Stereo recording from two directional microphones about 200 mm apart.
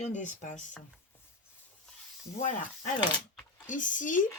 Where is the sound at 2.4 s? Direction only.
40° left (ahead or behind).